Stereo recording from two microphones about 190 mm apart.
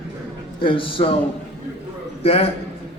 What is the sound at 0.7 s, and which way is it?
Speech, 25° left (ahead or behind).